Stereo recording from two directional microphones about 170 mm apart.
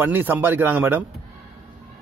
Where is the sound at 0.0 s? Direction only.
10° right (ahead or behind).